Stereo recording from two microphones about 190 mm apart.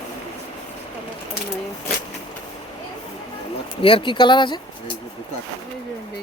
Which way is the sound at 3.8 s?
30° left (ahead or behind).